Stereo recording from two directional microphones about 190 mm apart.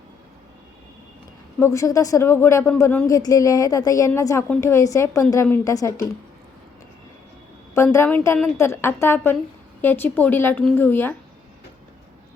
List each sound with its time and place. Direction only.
1.5 s speech: 15° left (ahead or behind)
7.9 s speech: 10° left (ahead or behind)